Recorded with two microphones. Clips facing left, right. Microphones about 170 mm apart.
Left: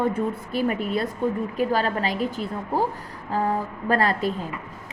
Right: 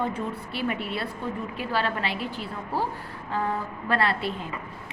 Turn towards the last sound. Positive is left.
turn(degrees=40)  # may be behind; listen again after turning